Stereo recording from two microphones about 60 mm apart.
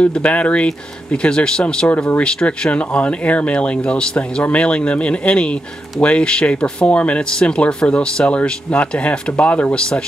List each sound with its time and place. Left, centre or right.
0.0 s speech: left